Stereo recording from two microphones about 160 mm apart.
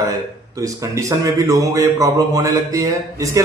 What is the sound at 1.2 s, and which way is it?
Speech, 20° right (ahead or behind).